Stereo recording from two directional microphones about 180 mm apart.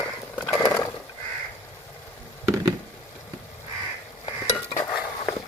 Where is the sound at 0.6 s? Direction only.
15° left (ahead or behind).